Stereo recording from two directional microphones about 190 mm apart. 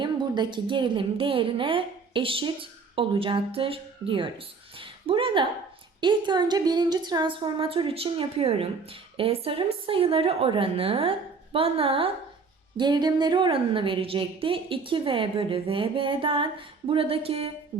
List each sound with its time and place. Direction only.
0.0 s a woman's voice: 25° right (ahead or behind)
4.8 s a sound: 30° right (ahead or behind)
6.0 s a woman's voice: 25° right (ahead or behind)